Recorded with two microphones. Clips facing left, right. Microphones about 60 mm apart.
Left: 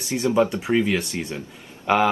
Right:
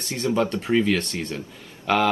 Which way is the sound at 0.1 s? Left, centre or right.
Centre.